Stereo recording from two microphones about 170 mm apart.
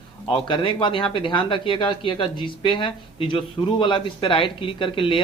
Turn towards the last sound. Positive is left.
turn(degrees=30)  # may be behind; listen again after turning